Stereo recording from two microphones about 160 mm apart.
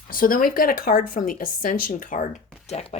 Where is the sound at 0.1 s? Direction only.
60° left (ahead or behind).